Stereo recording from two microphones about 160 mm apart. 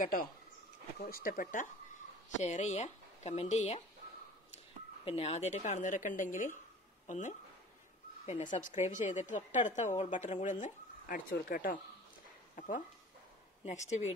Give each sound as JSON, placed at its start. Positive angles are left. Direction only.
{"t": 0.0, "sound": "speech", "side_deg": 60}
{"t": 2.3, "sound": "a woman's voice", "side_deg": 45}
{"t": 5.0, "sound": "a woman's voice", "side_deg": 40}